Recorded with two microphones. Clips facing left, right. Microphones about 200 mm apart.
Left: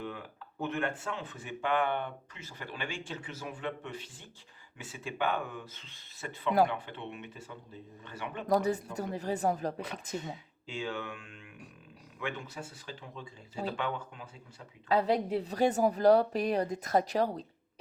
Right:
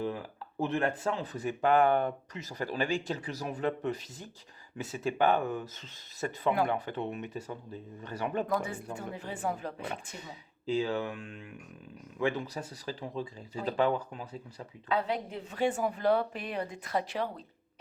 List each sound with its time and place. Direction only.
0.0 s speech: 35° right (ahead or behind)
8.4 s a woman's voice: 40° left (ahead or behind)
10.7 s speech: 35° right (ahead or behind)
14.8 s a woman's voice: 35° left (ahead or behind)